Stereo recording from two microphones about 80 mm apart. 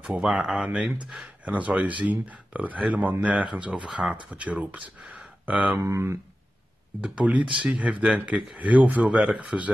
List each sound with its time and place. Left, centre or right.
0.0 s speech: centre
5.8 s speech: right
7.0 s speech: centre